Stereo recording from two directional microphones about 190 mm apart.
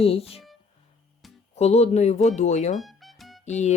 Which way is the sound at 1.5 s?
35° left (ahead or behind).